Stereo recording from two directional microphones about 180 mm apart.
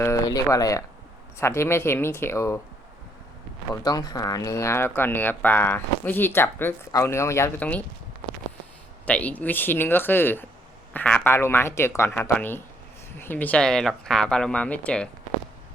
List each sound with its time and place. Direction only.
0.0 s speech: 20° left (ahead or behind)
3.8 s speech: 20° left (ahead or behind)
9.0 s speech: 10° left (ahead or behind)